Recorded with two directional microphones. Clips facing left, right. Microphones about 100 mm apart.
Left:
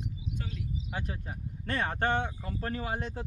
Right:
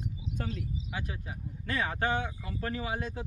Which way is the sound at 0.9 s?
35° left (ahead or behind).